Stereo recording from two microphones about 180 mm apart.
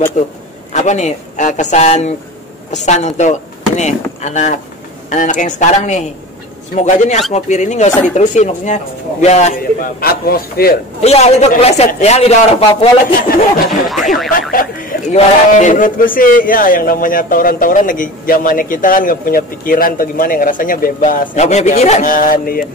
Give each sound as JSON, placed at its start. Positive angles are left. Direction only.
{"t": 0.2, "sound": "a man's voice", "side_deg": 40}
{"t": 9.9, "sound": "speech", "side_deg": 55}
{"t": 11.0, "sound": "a man's voice", "side_deg": 35}
{"t": 13.7, "sound": "speech", "side_deg": 0}
{"t": 14.5, "sound": "speech", "side_deg": 50}